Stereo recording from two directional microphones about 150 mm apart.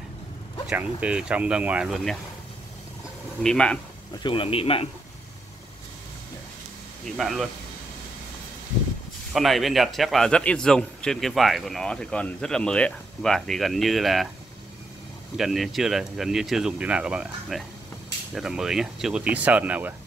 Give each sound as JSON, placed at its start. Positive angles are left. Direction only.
{"t": 0.7, "sound": "speech", "side_deg": -5}
{"t": 3.4, "sound": "speech", "side_deg": 5}
{"t": 4.1, "sound": "speech", "side_deg": 35}
{"t": 7.2, "sound": "a man's voice", "side_deg": 0}
{"t": 9.3, "sound": "a man's voice", "side_deg": 0}
{"t": 15.3, "sound": "a man's voice", "side_deg": 0}